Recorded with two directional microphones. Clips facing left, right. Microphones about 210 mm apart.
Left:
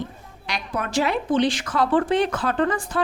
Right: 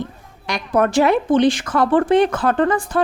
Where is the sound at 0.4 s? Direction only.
50° right (ahead or behind).